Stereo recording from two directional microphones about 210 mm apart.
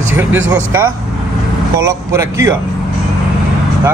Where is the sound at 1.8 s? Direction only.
15° right (ahead or behind).